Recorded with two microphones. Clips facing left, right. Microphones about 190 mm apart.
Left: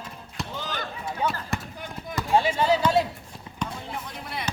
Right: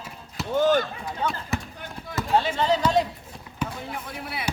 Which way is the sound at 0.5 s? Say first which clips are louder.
Right 17 dB; 50° right (ahead or behind).